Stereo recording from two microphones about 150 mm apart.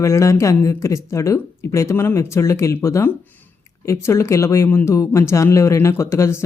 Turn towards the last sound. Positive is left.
turn(degrees=15)  # may be behind; listen again after turning